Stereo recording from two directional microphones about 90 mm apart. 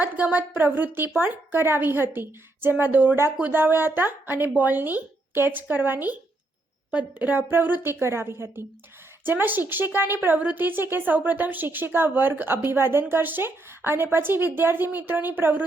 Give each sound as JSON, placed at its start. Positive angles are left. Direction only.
{"t": 0.0, "sound": "a woman's voice", "side_deg": -15}